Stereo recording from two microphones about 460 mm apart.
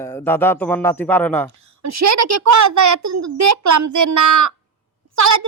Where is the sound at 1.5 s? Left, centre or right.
Right.